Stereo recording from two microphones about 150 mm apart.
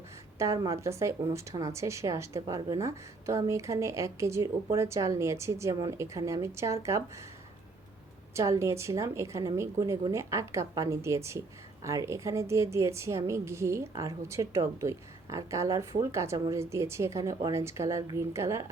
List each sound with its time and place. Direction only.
0.3 s a woman's voice: 20° right (ahead or behind)
8.3 s a woman's voice: 20° right (ahead or behind)